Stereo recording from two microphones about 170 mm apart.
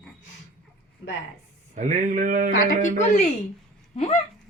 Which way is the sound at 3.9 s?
35° left (ahead or behind).